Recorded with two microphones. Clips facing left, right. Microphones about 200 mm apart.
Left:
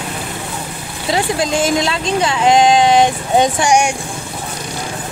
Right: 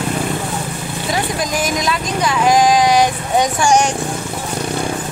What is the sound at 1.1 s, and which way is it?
Speech, 25° left (ahead or behind).